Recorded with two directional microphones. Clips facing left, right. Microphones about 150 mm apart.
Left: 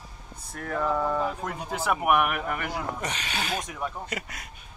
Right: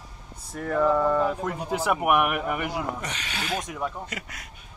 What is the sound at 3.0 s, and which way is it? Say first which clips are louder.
Speech: left 2 dB; 30° left (ahead or behind).